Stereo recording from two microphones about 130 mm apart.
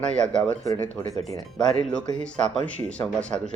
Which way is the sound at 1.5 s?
5° left (ahead or behind).